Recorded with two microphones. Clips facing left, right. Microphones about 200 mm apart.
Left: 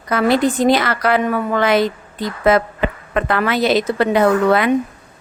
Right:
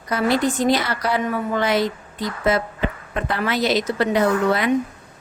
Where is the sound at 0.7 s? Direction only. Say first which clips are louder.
Left 5 dB; 90° left.